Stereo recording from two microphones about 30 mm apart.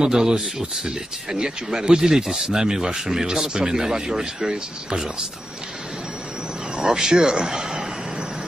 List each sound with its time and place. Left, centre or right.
0.0 s speech: right
6.8 s speech: right